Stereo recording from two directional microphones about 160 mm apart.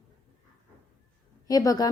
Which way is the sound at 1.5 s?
20° left (ahead or behind).